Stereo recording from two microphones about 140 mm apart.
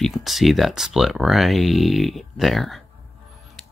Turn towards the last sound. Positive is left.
turn(degrees=5)  # may be behind; listen again after turning